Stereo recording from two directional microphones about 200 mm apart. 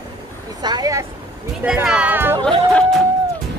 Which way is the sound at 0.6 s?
20° right (ahead or behind).